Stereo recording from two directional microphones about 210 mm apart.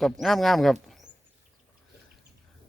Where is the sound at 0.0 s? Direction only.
Centre (ahead or behind).